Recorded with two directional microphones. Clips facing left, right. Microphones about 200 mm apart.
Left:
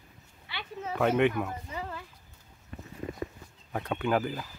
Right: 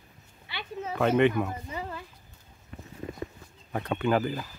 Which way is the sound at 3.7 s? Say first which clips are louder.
Right 2 dB; centre (ahead or behind).